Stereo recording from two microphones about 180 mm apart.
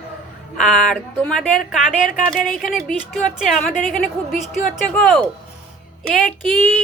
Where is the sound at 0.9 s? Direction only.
5° left (ahead or behind).